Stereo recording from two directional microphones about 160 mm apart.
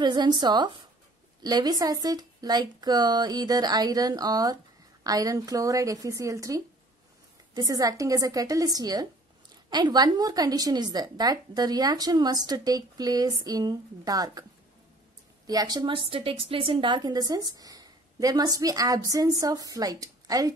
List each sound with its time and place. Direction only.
0.0 s a woman's voice: 30° right (ahead or behind)
15.4 s a woman's voice: 25° right (ahead or behind)